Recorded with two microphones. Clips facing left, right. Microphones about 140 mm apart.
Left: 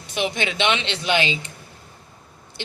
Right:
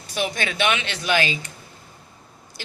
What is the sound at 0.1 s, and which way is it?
Speech, 20° left (ahead or behind).